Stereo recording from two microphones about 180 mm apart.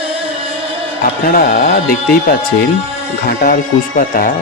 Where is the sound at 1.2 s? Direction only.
50° left (ahead or behind).